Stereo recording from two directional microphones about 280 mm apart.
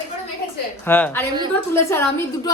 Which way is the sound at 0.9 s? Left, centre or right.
Centre.